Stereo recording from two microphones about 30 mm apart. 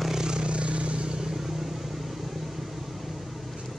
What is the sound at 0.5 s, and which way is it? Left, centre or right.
Vehicle, right.